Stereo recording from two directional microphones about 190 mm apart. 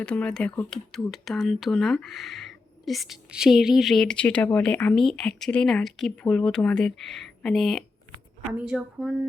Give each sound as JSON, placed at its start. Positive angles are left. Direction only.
{"t": 0.0, "sound": "speech", "side_deg": 5}